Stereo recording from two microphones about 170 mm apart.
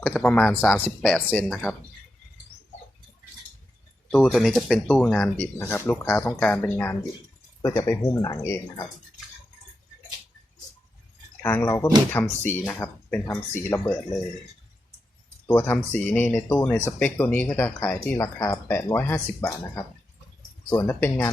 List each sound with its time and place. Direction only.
0.0 s speech: 5° left (ahead or behind)
4.1 s speech: centre (ahead or behind); by 8.9 s 20° left (ahead or behind)
11.4 s speech: 15° left (ahead or behind)
15.4 s speech: 15° left (ahead or behind)
20.8 s speech: 10° left (ahead or behind)